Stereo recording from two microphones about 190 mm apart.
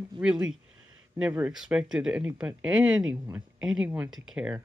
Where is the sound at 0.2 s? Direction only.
5° right (ahead or behind).